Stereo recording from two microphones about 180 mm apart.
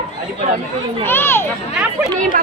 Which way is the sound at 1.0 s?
10° left (ahead or behind).